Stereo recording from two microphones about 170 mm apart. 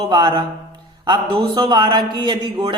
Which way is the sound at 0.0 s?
25° right (ahead or behind).